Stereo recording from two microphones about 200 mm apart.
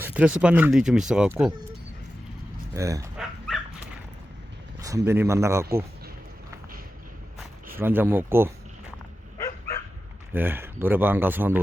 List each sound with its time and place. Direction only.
0.0 s speech: 5° right (ahead or behind)
2.7 s speech: 15° right (ahead or behind)
3.2 s dog: centre (ahead or behind)
4.8 s speech: 15° right (ahead or behind)
7.8 s speech: 10° right (ahead or behind)
10.3 s speech: 10° right (ahead or behind)